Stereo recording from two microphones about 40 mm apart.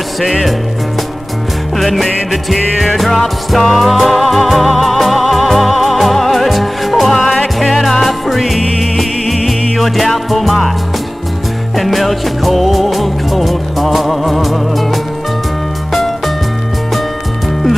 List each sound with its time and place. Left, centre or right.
0.2 s music: centre
1.8 s music: centre
11.7 s music: centre